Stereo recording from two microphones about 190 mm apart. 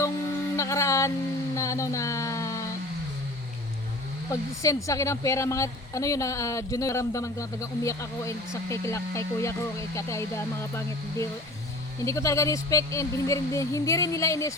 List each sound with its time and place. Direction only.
0.5 s music: 15° left (ahead or behind)
1.5 s a sound: 15° left (ahead or behind)
4.3 s a woman's voice: 15° left (ahead or behind)